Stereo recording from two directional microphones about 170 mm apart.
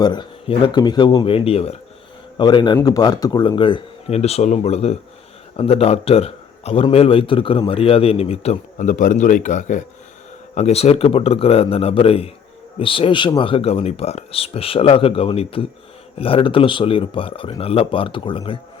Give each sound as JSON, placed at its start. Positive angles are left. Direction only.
{"t": 0.0, "sound": "a man's voice", "side_deg": 25}